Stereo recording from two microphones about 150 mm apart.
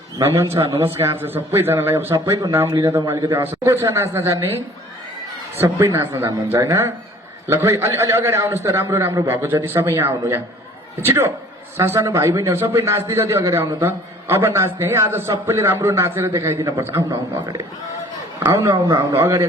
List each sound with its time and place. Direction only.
0.2 s a man's voice: 20° right (ahead or behind)
2.6 s a man's voice: 35° right (ahead or behind)
2.9 s a man's voice: 20° right (ahead or behind)
5.5 s a man's voice: 15° right (ahead or behind)